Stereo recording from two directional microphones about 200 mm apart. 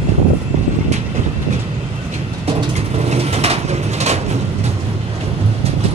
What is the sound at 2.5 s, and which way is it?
Bird, 30° right (ahead or behind).